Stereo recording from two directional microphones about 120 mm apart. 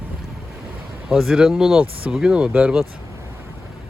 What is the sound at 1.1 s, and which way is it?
Speech, 5° right (ahead or behind).